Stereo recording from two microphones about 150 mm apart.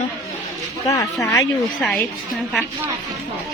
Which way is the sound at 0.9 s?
20° left (ahead or behind).